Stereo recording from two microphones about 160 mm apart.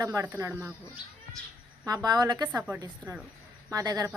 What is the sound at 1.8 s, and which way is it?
A woman's voice, 25° right (ahead or behind).